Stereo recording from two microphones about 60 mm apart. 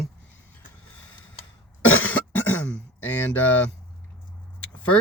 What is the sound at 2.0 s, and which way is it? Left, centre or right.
Cough, left.